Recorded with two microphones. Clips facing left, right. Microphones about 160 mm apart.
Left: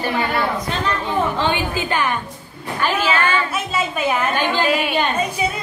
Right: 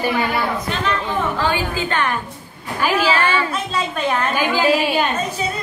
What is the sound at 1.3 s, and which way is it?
Speech, 20° left (ahead or behind).